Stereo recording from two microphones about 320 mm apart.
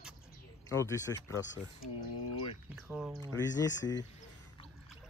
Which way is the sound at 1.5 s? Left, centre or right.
Left.